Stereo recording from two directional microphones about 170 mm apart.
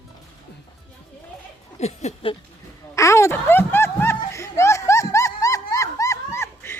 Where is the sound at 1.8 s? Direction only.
40° left (ahead or behind).